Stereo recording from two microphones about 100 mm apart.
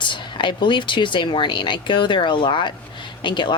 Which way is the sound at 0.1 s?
55° left (ahead or behind).